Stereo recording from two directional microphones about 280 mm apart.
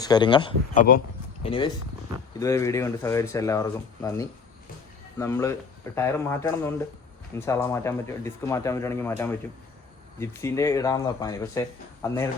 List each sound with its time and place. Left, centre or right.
0.0 s speech: centre
0.8 s speech: left
1.5 s speech: centre